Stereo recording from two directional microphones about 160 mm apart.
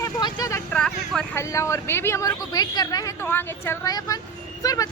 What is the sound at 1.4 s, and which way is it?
Speech, 20° left (ahead or behind).